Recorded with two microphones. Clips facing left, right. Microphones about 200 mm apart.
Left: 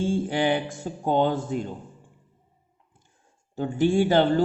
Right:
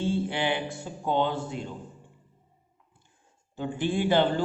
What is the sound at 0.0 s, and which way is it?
A man's voice, 45° left (ahead or behind).